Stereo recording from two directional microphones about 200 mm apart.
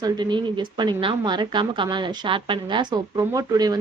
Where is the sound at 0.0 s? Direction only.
20° right (ahead or behind).